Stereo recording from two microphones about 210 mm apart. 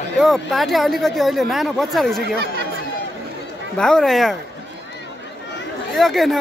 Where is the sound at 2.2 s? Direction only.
50° right (ahead or behind).